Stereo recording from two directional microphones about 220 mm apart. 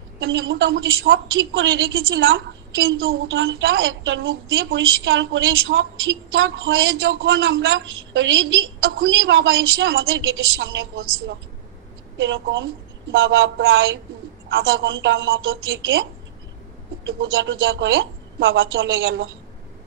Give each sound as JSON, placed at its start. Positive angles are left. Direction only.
{"t": 0.2, "sound": "a woman's voice", "side_deg": -60}
{"t": 14.5, "sound": "a woman's voice", "side_deg": -50}
{"t": 17.2, "sound": "a woman's voice", "side_deg": -55}